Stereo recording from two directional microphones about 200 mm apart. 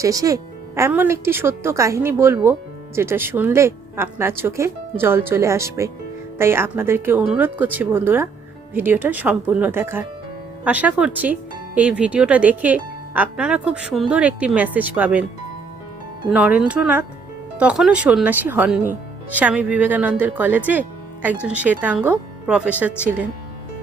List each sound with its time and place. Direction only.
0.0 s a woman's voice: 15° right (ahead or behind)
16.3 s a woman's voice: 5° right (ahead or behind)